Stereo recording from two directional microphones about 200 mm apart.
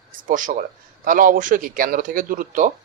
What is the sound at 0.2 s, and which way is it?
A man's voice, 40° right (ahead or behind).